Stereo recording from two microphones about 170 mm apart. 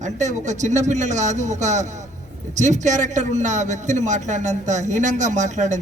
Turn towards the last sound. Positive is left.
turn(degrees=-45)  # may be behind; listen again after turning